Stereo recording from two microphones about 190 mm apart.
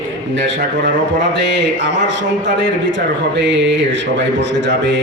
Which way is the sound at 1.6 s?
70° right (ahead or behind).